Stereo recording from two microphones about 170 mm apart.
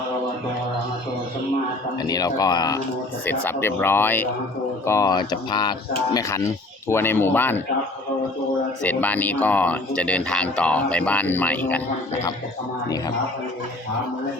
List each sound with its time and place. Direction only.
2.0 s speech: 20° left (ahead or behind)
3.2 s speech: 15° left (ahead or behind)
8.8 s speech: 10° left (ahead or behind)